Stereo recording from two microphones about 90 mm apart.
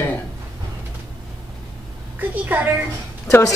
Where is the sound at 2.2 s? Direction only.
20° right (ahead or behind).